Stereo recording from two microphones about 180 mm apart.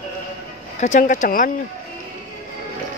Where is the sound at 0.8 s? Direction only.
45° left (ahead or behind).